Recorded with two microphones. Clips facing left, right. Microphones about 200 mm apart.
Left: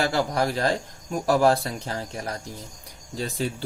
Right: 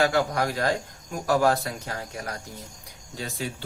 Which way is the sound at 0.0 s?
30° left (ahead or behind).